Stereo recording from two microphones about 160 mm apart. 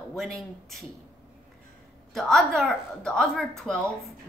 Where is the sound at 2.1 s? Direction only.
Centre (ahead or behind).